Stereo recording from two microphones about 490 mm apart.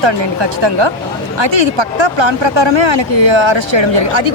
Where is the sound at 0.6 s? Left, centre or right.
Right.